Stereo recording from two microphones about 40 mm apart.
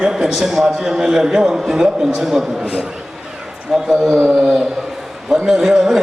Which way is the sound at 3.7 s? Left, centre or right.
Centre.